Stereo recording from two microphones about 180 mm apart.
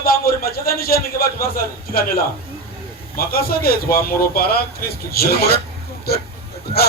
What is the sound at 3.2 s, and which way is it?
A man's voice, 55° left (ahead or behind).